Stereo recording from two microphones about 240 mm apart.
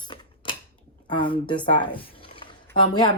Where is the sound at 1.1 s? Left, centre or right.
Centre.